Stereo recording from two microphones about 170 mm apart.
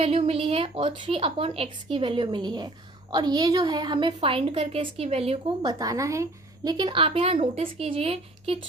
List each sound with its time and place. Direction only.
0.0 s a woman's voice: 35° right (ahead or behind)
5.8 s a woman's voice: 20° right (ahead or behind); by 8.5 s 35° right (ahead or behind)